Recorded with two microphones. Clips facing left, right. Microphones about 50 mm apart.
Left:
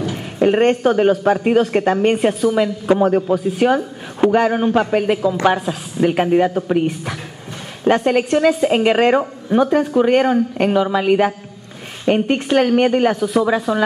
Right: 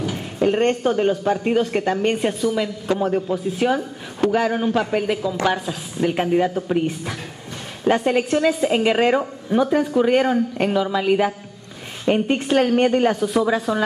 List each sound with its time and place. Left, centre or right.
0.1 s a woman's voice: centre